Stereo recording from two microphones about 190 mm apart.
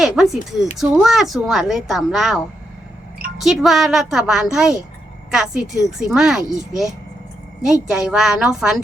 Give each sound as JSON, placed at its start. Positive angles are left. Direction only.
{"t": 0.0, "sound": "a woman's voice", "side_deg": 0}
{"t": 3.4, "sound": "a woman's voice", "side_deg": 0}